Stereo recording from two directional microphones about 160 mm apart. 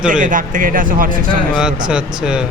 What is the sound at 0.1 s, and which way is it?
Speech, 55° right (ahead or behind).